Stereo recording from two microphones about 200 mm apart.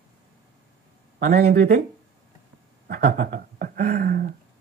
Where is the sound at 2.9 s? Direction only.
50° right (ahead or behind).